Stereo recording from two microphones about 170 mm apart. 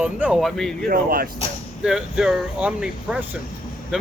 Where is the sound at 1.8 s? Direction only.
5° right (ahead or behind).